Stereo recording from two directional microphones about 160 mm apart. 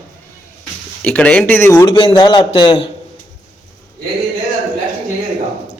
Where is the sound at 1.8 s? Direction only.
30° left (ahead or behind).